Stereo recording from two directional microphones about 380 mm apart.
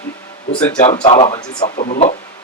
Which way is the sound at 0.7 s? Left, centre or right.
Centre.